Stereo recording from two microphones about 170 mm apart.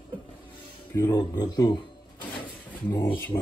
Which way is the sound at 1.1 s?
25° left (ahead or behind).